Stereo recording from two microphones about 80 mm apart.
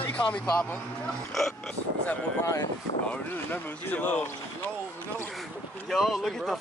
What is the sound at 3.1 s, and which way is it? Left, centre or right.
Speech, left.